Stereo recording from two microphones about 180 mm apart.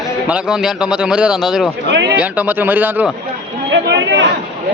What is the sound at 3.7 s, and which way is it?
Speech, 80° right.